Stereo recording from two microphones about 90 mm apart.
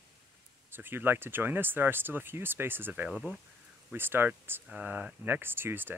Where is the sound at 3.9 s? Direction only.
25° right (ahead or behind).